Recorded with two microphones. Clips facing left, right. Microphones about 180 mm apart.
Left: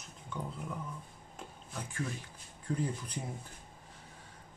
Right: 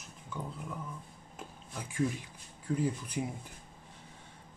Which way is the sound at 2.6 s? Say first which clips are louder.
Right 3 dB; 5° right (ahead or behind).